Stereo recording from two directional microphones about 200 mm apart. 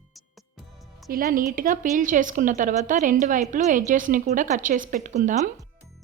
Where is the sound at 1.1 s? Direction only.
45° right (ahead or behind).